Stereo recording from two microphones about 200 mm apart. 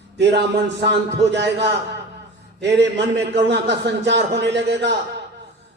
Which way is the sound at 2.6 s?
60° right (ahead or behind).